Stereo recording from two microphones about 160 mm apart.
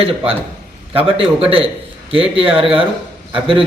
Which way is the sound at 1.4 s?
35° right (ahead or behind).